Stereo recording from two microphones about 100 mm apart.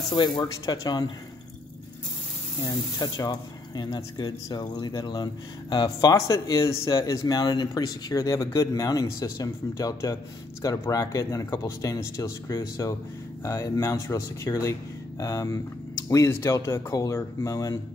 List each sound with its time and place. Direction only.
0.4 s speech: 45° left (ahead or behind)
2.6 s speech: 40° left (ahead or behind)